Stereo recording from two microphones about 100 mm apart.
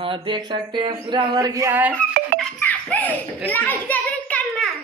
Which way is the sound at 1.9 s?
15° left (ahead or behind).